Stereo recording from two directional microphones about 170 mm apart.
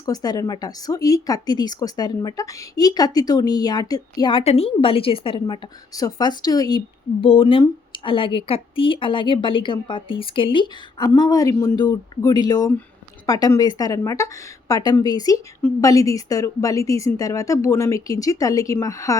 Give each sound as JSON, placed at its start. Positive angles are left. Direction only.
{"t": 0.0, "sound": "speech", "side_deg": 20}